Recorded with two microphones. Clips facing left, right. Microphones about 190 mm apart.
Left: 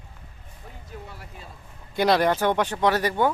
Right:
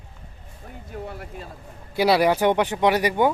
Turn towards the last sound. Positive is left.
turn(degrees=-15)  # may be behind; listen again after turning